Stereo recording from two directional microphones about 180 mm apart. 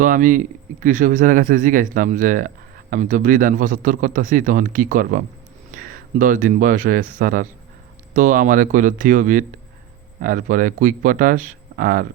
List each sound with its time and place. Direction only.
0.0 s speech: 45° right (ahead or behind)